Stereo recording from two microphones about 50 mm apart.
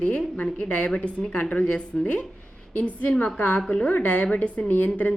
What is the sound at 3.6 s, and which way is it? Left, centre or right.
Speech, centre.